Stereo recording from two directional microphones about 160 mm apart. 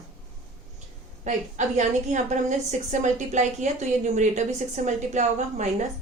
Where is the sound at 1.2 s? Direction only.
50° right (ahead or behind).